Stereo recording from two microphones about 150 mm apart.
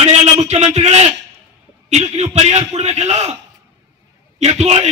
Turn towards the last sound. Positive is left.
turn(degrees=-50)  # may be behind; listen again after turning